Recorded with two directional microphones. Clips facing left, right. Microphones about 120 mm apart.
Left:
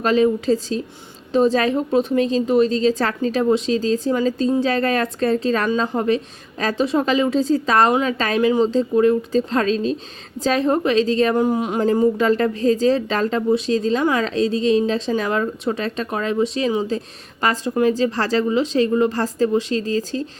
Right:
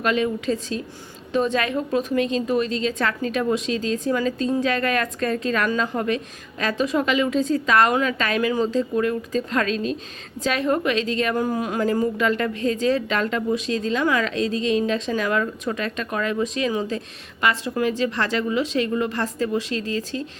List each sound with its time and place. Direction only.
0.0 s a woman's voice: 35° left (ahead or behind)
11.3 s speech: 20° left (ahead or behind)
12.1 s a woman's voice: 35° left (ahead or behind)